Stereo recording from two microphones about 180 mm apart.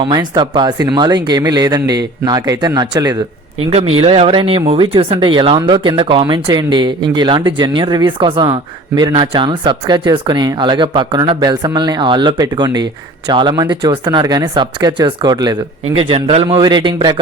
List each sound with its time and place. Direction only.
0.1 s speech: 25° right (ahead or behind)
3.7 s speech: 35° right (ahead or behind)